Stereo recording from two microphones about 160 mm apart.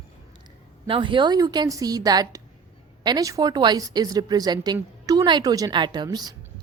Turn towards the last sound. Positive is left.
turn(degrees=-25)  # may be behind; listen again after turning